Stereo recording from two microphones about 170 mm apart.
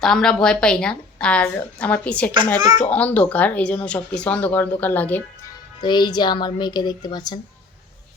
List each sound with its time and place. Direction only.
0.0 s a woman's voice: 5° left (ahead or behind)
5.8 s speech: 25° left (ahead or behind)